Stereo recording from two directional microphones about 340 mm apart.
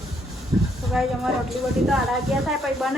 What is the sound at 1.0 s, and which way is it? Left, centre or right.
Speech, centre.